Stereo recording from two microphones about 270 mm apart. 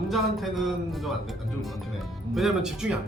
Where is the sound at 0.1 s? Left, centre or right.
Centre.